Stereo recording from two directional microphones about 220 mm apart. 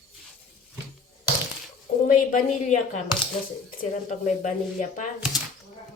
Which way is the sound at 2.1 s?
35° left (ahead or behind).